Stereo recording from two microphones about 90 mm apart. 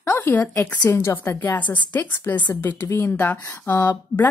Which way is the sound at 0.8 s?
25° left (ahead or behind).